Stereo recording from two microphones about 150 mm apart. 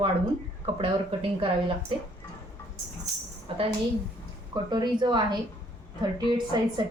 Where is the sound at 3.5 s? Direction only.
35° right (ahead or behind).